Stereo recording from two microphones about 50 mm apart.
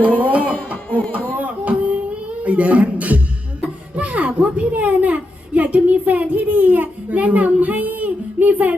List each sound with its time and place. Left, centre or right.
0.2 s music: right
0.5 s music: left
1.4 s a sound: right
2.4 s a woman's voice: right